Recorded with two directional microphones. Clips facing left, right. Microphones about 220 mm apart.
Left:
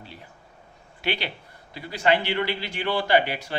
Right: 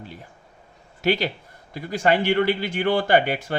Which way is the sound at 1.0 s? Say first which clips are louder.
Right 7 dB; 45° right (ahead or behind).